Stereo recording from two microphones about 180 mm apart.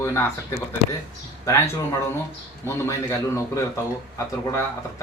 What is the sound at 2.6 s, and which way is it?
Speech, 15° left (ahead or behind).